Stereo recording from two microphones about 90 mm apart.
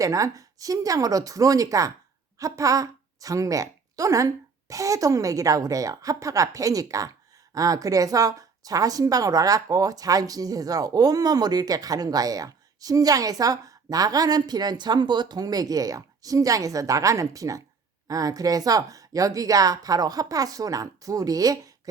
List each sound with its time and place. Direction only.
0.0 s a woman's voice: 40° right (ahead or behind)